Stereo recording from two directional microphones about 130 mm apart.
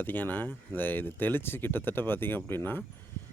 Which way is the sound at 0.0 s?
15° left (ahead or behind).